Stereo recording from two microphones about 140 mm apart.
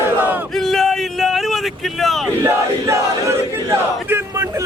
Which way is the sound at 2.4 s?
20° right (ahead or behind).